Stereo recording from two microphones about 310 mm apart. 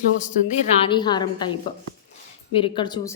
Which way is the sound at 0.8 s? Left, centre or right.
Centre.